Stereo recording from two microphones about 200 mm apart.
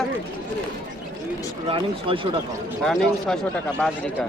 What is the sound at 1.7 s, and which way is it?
Speech, 25° right (ahead or behind).